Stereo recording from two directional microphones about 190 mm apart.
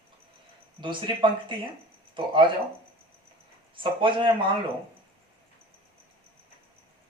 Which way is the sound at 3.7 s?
25° right (ahead or behind).